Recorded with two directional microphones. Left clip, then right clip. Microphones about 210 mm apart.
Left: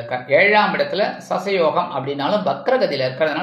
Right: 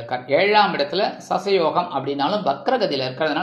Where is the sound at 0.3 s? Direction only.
25° right (ahead or behind).